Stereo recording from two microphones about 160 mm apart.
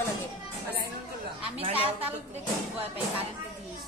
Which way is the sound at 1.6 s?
35° right (ahead or behind).